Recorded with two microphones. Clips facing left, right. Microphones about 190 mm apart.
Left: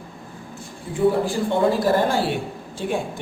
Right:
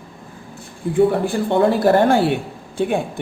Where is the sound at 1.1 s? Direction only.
60° right (ahead or behind).